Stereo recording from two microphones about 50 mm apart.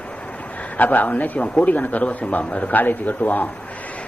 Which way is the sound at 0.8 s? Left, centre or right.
Left.